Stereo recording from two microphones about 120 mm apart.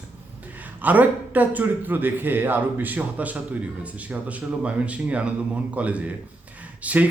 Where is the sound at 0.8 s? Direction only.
15° right (ahead or behind).